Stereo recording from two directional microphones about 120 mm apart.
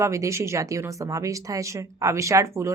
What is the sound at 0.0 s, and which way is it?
Speech, 25° right (ahead or behind).